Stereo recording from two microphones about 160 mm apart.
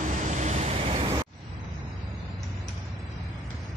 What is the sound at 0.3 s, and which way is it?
Vehicle, 45° right (ahead or behind).